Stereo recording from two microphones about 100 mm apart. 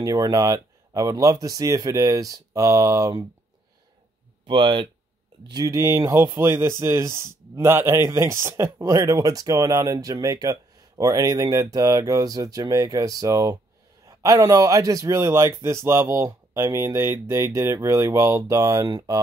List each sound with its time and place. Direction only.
0.0 s speech: 35° right (ahead or behind)
4.5 s speech: 55° right (ahead or behind)
5.5 s speech: 35° right (ahead or behind)